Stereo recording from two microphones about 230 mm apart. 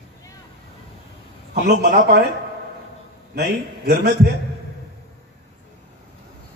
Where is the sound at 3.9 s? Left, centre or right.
Right.